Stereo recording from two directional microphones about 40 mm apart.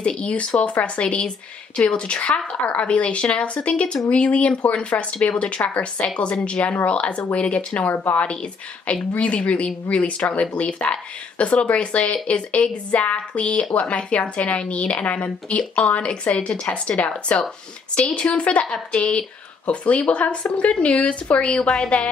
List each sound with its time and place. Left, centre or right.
0.0 s a woman's voice: left